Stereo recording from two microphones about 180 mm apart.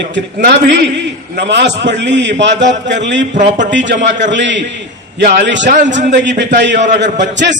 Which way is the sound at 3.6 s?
80° right.